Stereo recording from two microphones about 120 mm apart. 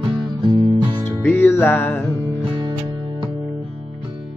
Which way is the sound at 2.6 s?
45° right (ahead or behind).